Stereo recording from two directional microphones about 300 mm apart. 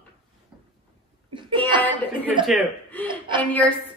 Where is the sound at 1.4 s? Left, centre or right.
Centre.